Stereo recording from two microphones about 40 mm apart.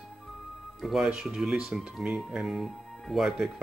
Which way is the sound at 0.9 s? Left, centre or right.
Centre.